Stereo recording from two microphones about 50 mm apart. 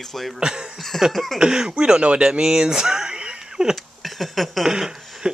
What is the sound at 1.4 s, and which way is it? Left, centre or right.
Speech, centre.